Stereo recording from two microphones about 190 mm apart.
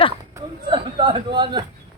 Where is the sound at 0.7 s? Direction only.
25° right (ahead or behind).